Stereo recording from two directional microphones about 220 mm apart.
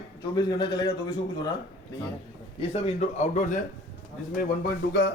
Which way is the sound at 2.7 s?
30° left (ahead or behind).